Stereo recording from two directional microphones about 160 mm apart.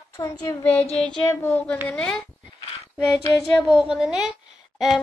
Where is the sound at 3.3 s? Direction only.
Centre (ahead or behind).